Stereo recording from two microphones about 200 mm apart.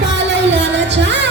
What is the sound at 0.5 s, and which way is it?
Music, 60° right (ahead or behind).